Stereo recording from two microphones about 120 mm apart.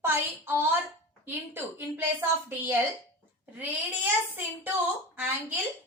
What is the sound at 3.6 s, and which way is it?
A child's voice, 15° right (ahead or behind).